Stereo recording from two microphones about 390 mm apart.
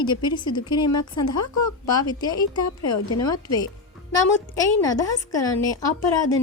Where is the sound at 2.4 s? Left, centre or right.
Left.